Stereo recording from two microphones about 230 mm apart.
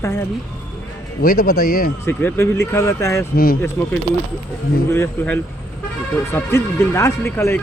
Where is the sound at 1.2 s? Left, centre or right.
Left.